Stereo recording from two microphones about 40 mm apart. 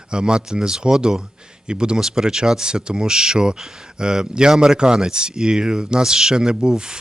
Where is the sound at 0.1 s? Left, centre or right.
Right.